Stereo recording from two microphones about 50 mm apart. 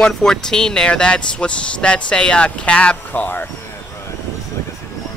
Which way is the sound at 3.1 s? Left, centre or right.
Left.